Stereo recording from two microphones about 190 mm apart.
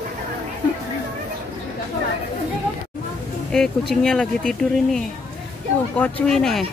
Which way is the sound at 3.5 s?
Centre (ahead or behind).